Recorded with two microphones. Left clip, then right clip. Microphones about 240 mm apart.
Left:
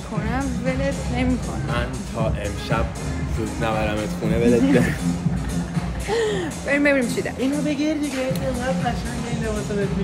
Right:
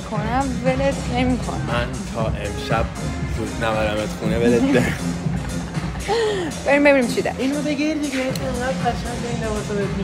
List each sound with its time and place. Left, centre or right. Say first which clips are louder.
0.3 s speech: right 5 dB; centre
3.6 s speech: right 3 dB; centre
6.0 s speech: right 2 dB; centre